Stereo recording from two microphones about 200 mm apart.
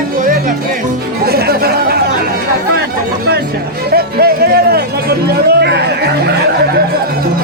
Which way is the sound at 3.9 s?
50° right (ahead or behind).